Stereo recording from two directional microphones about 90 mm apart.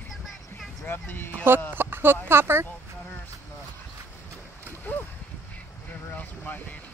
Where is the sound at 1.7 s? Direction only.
25° right (ahead or behind).